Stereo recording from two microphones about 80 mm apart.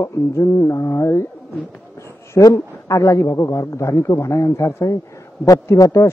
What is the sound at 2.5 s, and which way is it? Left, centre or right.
A man's voice, left.